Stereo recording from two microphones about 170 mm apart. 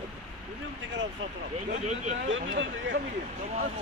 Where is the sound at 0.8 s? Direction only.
90° right.